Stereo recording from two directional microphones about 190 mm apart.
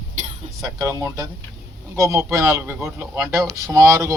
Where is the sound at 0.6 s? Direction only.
15° right (ahead or behind).